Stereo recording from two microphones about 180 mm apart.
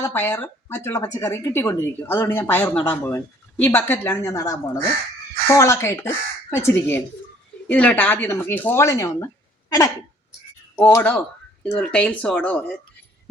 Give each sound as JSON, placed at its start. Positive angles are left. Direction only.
{"t": 0.0, "sound": "speech", "side_deg": 10}
{"t": 10.8, "sound": "speech", "side_deg": 15}